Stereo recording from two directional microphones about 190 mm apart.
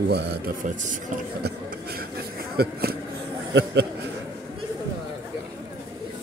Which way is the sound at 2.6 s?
55° right (ahead or behind).